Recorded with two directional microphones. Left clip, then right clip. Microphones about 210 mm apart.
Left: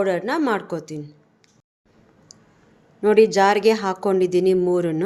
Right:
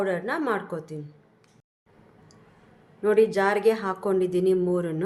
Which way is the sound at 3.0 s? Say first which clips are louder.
Left 6 dB; 35° left (ahead or behind).